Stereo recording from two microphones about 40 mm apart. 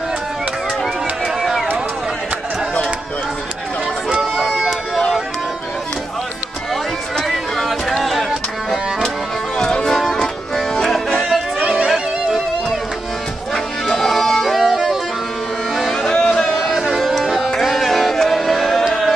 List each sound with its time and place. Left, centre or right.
4.2 s a sound: centre
7.2 s a sound: centre
9.6 s music: centre
13.8 s music: centre
16.0 s music: centre
16.5 s music: centre